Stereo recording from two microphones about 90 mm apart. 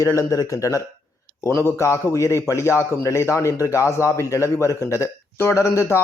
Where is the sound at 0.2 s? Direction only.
35° left (ahead or behind).